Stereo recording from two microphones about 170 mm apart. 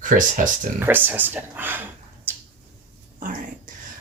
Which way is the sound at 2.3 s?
10° right (ahead or behind).